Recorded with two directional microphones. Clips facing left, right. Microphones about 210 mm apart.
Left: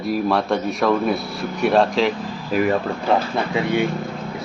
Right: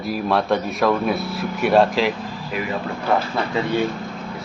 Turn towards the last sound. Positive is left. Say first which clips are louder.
# left 1 dB
turn(degrees=15)  # may be behind; listen again after turning